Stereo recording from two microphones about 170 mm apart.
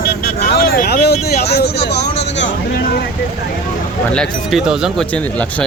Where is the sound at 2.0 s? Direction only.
40° left (ahead or behind).